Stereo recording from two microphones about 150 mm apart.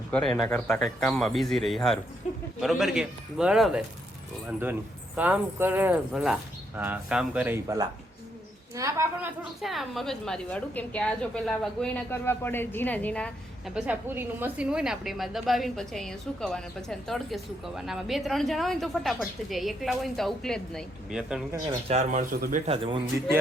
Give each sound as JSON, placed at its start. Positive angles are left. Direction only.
{"t": 0.1, "sound": "a woman's voice", "side_deg": 5}
{"t": 9.4, "sound": "a woman's voice", "side_deg": 0}
{"t": 12.2, "sound": "a woman's voice", "side_deg": 15}
{"t": 13.7, "sound": "a woman's voice", "side_deg": -10}
{"t": 21.8, "sound": "speech", "side_deg": -55}
{"t": 22.6, "sound": "a man's voice", "side_deg": -40}